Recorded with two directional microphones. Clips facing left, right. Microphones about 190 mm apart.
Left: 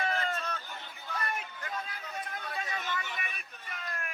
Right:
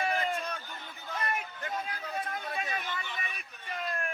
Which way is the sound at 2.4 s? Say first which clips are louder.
Right 2 dB; 25° right (ahead or behind).